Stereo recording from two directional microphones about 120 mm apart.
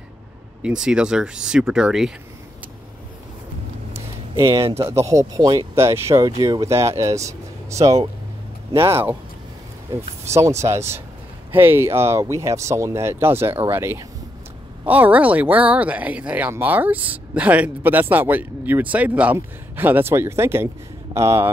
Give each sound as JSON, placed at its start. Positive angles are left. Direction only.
{"t": 0.6, "sound": "speech", "side_deg": -10}
{"t": 4.4, "sound": "speech", "side_deg": -45}
{"t": 4.7, "sound": "speech", "side_deg": -25}
{"t": 10.2, "sound": "speech", "side_deg": -25}